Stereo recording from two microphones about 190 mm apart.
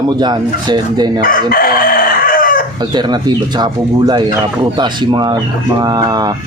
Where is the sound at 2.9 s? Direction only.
20° right (ahead or behind).